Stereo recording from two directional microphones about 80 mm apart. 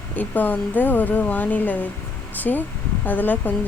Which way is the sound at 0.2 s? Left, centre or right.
Left.